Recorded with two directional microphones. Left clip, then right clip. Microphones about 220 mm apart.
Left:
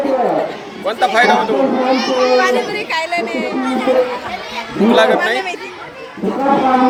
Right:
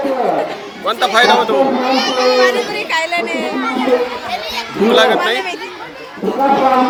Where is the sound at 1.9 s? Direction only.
35° right (ahead or behind).